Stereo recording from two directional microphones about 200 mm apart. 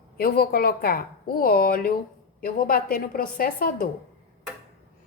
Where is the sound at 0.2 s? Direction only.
50° left (ahead or behind).